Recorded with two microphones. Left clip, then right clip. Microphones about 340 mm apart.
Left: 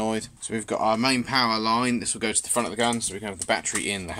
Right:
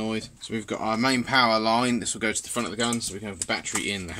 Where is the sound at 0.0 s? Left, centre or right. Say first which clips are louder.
Left 3 dB; centre.